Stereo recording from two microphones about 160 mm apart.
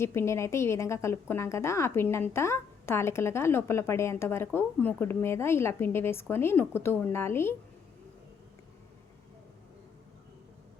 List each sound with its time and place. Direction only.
0.0 s speech: 15° left (ahead or behind)